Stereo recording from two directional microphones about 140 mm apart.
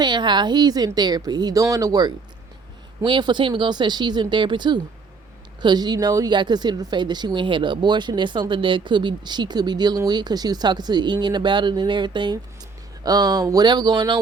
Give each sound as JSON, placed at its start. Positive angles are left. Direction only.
{"t": 0.0, "sound": "a woman's voice", "side_deg": -30}